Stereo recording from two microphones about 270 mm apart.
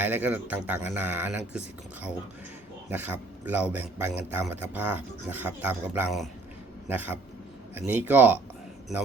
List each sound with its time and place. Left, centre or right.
0.0 s speech: centre